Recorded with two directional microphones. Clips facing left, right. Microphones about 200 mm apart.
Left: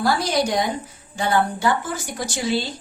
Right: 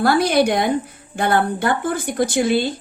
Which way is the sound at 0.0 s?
60° right (ahead or behind).